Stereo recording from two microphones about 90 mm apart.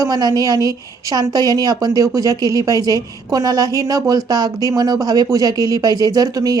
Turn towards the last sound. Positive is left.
turn(degrees=-45)  # may be behind; listen again after turning